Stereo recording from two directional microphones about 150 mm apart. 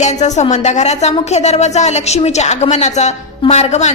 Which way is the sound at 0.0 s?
50° left (ahead or behind).